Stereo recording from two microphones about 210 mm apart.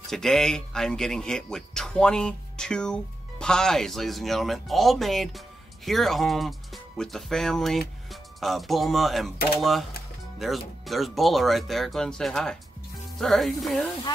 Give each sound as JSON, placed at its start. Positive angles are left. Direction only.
{"t": 0.1, "sound": "a man's voice", "side_deg": 0}